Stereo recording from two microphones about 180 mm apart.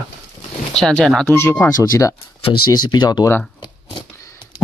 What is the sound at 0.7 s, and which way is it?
Speech, 5° left (ahead or behind).